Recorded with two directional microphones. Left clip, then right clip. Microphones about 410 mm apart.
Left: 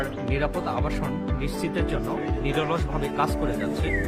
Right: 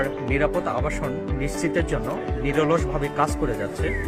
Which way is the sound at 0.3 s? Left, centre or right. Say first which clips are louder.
Right 5 dB; centre.